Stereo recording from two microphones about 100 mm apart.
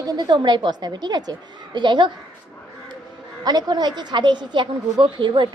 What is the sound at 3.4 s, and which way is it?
A woman's voice, 40° right (ahead or behind).